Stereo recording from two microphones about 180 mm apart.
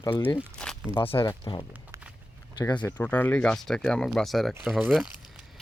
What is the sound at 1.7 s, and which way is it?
Walk, 10° right (ahead or behind).